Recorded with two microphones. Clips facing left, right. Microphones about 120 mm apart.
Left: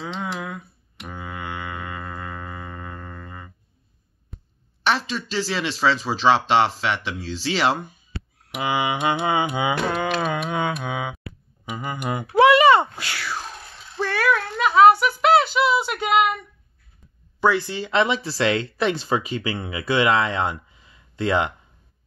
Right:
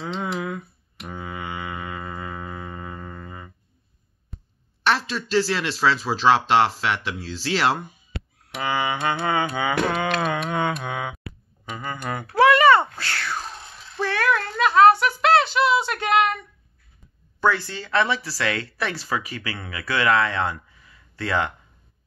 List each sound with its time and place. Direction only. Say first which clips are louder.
0.0 s music: right 2 dB; centre (ahead or behind)
4.3 s quack: even; centre (ahead or behind)
4.8 s speech: even; centre (ahead or behind)
8.5 s music: left 2 dB; 15° left (ahead or behind)
9.8 s speech: even; 5° left (ahead or behind)
11.6 s a sound: left 2 dB; 15° left (ahead or behind)
17.4 s speech: left 2 dB; 15° left (ahead or behind)